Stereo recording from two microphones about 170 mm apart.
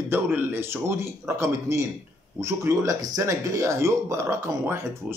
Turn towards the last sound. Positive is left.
turn(degrees=-15)  # may be behind; listen again after turning